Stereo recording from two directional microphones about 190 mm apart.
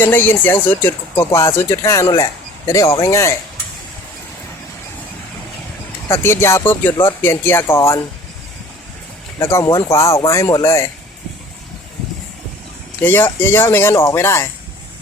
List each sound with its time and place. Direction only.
0.0 s speech: 10° left (ahead or behind)
6.1 s speech: 15° left (ahead or behind)
9.4 s speech: 15° left (ahead or behind)
13.0 s speech: 10° left (ahead or behind)